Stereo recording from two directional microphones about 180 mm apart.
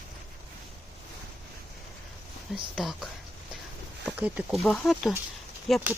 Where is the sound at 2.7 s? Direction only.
Centre (ahead or behind).